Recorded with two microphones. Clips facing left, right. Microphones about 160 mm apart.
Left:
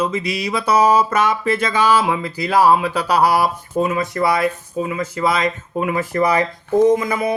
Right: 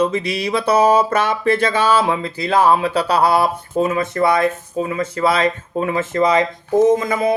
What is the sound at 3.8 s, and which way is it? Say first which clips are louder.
Speech: right 1 dB; 40° right (ahead or behind).